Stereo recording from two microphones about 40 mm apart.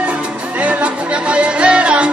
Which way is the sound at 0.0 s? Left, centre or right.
Right.